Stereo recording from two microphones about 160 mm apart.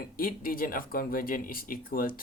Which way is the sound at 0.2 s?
65° left (ahead or behind).